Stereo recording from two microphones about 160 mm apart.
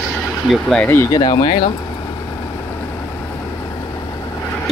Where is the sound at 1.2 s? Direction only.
30° left (ahead or behind).